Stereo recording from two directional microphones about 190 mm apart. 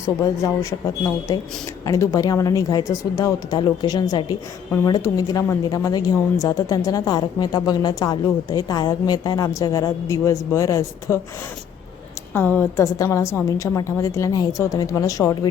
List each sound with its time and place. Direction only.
0.2 s a woman's voice: 15° left (ahead or behind)
12.3 s a woman's voice: 10° left (ahead or behind)